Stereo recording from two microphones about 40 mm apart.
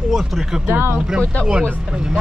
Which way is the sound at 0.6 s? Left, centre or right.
Right.